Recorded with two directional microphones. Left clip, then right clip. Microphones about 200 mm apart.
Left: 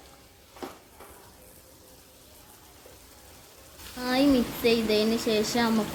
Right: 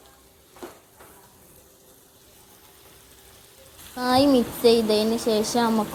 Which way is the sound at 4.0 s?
25° right (ahead or behind).